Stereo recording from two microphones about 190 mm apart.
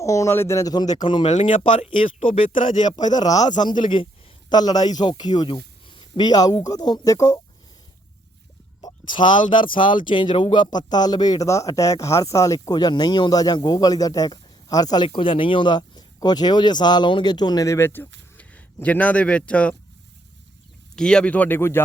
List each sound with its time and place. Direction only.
0.0 s speech: 15° left (ahead or behind)
1.3 s speech: 40° left (ahead or behind)
2.8 s speech: 20° left (ahead or behind)
8.8 s speech: 25° left (ahead or behind); by 19.7 s 5° left (ahead or behind)
20.9 s speech: 5° left (ahead or behind)